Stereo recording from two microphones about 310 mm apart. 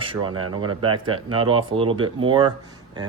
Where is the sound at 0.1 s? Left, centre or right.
Centre.